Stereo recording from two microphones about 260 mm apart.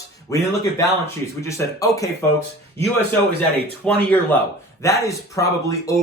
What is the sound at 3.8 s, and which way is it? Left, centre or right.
Speech, centre.